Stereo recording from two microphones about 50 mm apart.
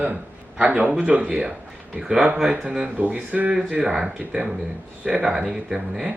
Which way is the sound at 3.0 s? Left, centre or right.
Right.